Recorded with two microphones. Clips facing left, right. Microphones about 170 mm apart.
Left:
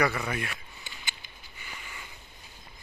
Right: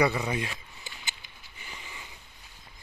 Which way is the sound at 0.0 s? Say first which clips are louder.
Right 2 dB; 20° right (ahead or behind).